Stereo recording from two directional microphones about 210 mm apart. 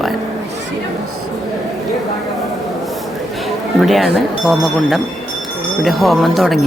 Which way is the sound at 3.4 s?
Centre (ahead or behind).